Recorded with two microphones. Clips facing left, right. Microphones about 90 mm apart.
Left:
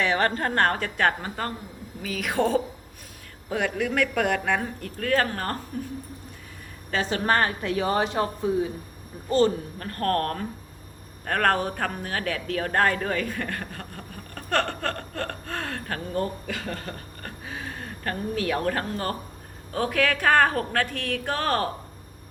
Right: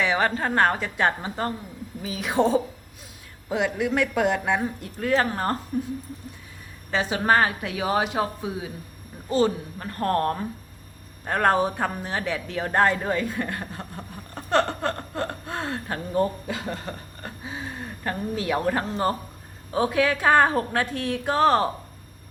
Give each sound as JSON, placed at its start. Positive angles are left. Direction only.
{"t": 0.0, "sound": "a woman's voice", "side_deg": -10}
{"t": 6.9, "sound": "a woman's voice", "side_deg": -10}
{"t": 9.7, "sound": "speech", "side_deg": -20}